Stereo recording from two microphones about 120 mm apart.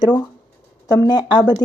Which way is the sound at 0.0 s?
35° left (ahead or behind).